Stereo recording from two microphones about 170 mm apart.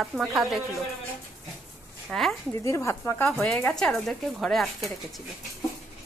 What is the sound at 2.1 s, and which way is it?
Speech, centre (ahead or behind).